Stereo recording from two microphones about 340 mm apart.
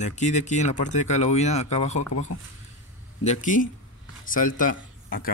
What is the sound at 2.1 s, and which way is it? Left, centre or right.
Speech, left.